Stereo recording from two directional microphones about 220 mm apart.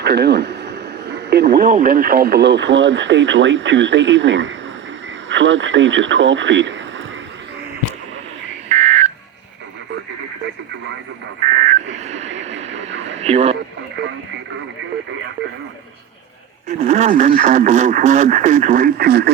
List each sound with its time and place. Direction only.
0.0 s speech: 50° right (ahead or behind)
8.7 s telephone dialing: 30° right (ahead or behind)
11.6 s a sound: 35° right (ahead or behind)
12.4 s vehicle: 30° right (ahead or behind)
13.1 s radio: 30° right (ahead or behind)
16.6 s speech: 30° right (ahead or behind)